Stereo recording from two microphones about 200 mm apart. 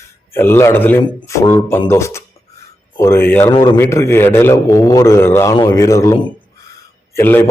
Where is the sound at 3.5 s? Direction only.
20° left (ahead or behind).